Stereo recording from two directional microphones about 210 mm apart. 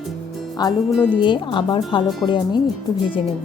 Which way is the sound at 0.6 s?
20° left (ahead or behind).